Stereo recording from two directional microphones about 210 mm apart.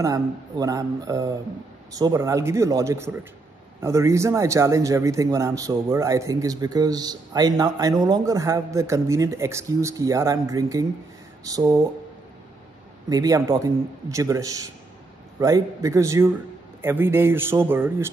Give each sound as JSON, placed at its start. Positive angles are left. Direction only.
{"t": 0.0, "sound": "speech", "side_deg": -15}
{"t": 13.1, "sound": "speech", "side_deg": -15}